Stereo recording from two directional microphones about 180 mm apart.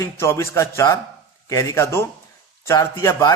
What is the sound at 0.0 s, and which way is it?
A man's voice, 15° left (ahead or behind).